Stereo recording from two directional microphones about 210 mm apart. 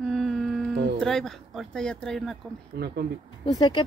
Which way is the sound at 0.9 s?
Centre (ahead or behind).